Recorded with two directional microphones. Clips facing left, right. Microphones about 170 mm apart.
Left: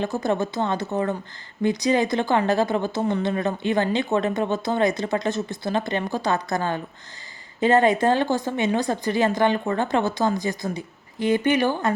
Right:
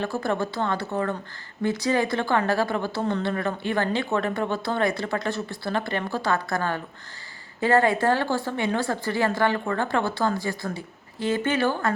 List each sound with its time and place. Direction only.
0.0 s speech: 20° left (ahead or behind)